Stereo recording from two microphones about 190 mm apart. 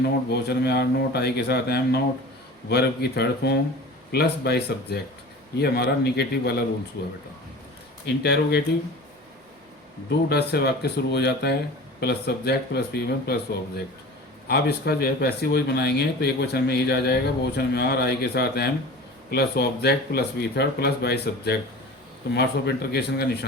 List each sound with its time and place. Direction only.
0.0 s speech: 60° left (ahead or behind)
8.0 s speech: 60° left (ahead or behind)
10.1 s speech: 60° left (ahead or behind)